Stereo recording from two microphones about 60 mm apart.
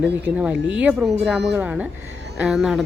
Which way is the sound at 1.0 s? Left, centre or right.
Centre.